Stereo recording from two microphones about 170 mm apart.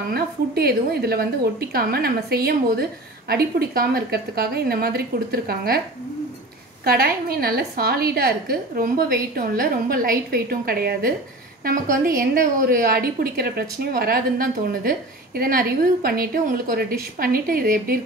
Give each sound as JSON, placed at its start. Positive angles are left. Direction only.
{"t": 0.1, "sound": "a woman's voice", "side_deg": -65}
{"t": 6.8, "sound": "a woman's voice", "side_deg": -65}